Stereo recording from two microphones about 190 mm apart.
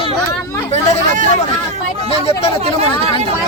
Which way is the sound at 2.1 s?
30° left (ahead or behind).